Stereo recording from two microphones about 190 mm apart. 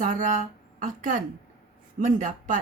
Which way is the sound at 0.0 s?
45° right (ahead or behind).